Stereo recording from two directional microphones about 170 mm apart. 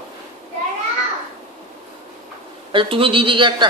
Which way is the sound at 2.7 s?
30° right (ahead or behind).